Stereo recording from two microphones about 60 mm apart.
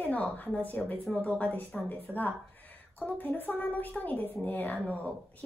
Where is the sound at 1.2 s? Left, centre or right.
Left.